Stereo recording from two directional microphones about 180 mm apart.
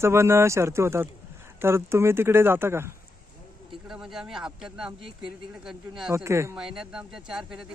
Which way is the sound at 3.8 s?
Centre (ahead or behind).